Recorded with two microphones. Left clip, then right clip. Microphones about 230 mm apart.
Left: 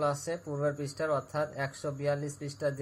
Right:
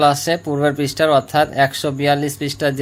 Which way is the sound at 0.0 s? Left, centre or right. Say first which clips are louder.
Right 17 dB; right.